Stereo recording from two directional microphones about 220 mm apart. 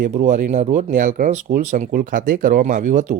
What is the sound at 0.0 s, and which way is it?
Speech, 35° right (ahead or behind).